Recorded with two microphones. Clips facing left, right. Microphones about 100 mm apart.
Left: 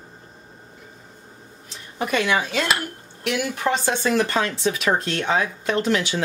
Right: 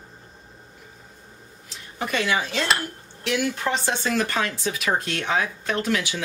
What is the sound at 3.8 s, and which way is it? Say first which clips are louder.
Speech: left 3 dB; 25° left (ahead or behind).